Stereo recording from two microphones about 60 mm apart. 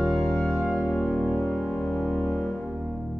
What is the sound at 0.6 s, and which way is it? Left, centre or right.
Music, centre.